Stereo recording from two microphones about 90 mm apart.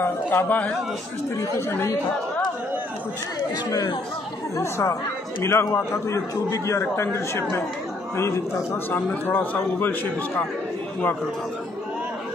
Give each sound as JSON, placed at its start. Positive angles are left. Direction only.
{"t": 0.0, "sound": "a man's voice", "side_deg": 25}
{"t": 3.3, "sound": "speech", "side_deg": 45}
{"t": 4.6, "sound": "a man's voice", "side_deg": 35}
{"t": 8.9, "sound": "a man's voice", "side_deg": 20}